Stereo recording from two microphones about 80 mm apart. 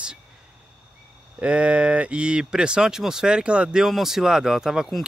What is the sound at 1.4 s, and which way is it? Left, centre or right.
Speech, centre.